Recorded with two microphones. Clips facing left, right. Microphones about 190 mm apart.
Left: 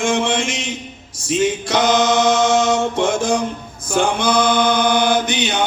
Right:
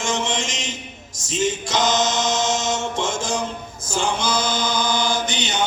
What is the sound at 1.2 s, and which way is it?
Music, 55° left (ahead or behind).